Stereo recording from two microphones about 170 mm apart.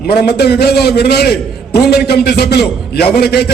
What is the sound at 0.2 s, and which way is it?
A man's voice, 70° left (ahead or behind).